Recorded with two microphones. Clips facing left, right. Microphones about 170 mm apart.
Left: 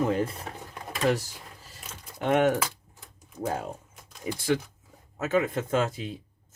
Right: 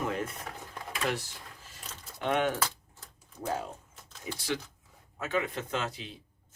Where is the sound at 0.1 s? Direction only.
30° left (ahead or behind).